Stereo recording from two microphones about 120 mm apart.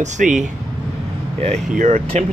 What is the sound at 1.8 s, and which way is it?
Speech, 80° right.